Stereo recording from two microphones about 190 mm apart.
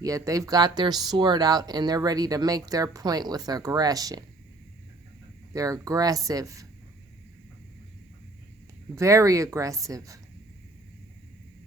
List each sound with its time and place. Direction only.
0.0 s speech: 15° right (ahead or behind)
5.5 s speech: 20° right (ahead or behind)
9.0 s speech: 15° right (ahead or behind)